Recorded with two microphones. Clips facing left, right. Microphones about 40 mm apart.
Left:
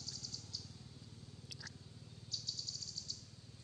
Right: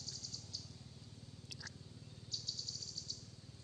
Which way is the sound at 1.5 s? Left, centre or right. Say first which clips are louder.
Right 1 dB; centre.